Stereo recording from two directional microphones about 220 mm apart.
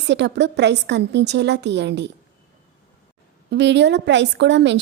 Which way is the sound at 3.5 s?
50° right (ahead or behind).